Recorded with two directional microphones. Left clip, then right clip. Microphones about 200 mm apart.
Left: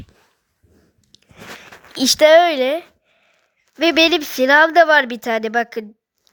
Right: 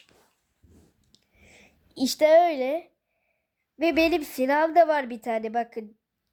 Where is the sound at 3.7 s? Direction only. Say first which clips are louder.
Left 8 dB; 20° left (ahead or behind).